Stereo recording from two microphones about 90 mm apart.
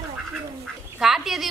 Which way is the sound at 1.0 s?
5° right (ahead or behind).